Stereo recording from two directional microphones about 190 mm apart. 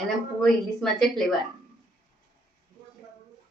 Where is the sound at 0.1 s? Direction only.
Centre (ahead or behind).